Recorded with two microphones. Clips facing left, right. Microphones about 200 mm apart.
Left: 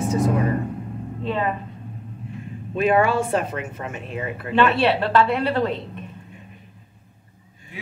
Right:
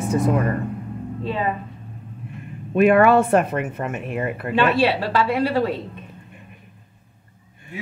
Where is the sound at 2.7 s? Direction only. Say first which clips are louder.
Right 5 dB; 60° right (ahead or behind).